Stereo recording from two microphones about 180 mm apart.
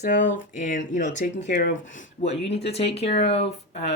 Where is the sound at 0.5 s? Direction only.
45° left (ahead or behind).